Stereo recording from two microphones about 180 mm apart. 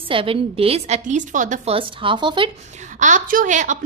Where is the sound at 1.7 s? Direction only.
25° right (ahead or behind).